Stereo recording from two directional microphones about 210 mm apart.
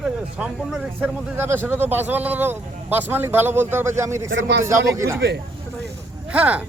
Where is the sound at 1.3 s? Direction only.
10° right (ahead or behind).